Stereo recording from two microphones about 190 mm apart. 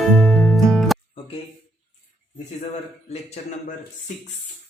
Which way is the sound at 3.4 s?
35° left (ahead or behind).